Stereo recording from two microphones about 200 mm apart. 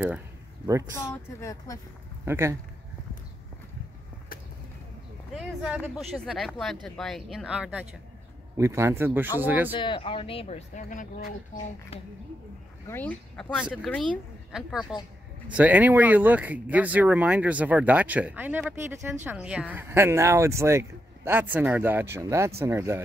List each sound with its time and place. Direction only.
0.9 s speech: 15° left (ahead or behind)
2.2 s speech: 10° right (ahead or behind)
5.3 s speech: 5° right (ahead or behind)
8.5 s speech: 15° right (ahead or behind)
9.8 s speech: 25° left (ahead or behind); by 11.2 s 40° left (ahead or behind)
12.8 s speech: 10° left (ahead or behind); by 22.9 s 15° right (ahead or behind)